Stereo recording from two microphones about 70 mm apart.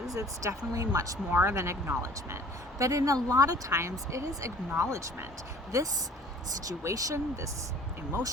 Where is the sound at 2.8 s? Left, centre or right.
Right.